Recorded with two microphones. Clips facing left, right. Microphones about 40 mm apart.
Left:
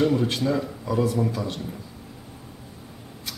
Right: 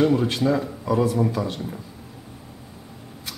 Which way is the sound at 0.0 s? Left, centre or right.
Centre.